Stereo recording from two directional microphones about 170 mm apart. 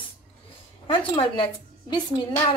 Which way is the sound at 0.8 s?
30° left (ahead or behind).